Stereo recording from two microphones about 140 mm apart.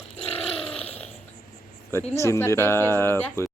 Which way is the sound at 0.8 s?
45° left (ahead or behind).